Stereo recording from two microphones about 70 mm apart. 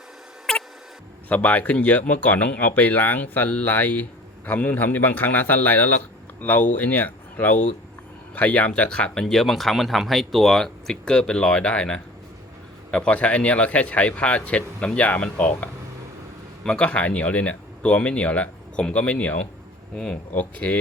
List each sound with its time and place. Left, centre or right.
0.5 s mouse: centre
1.3 s speech: left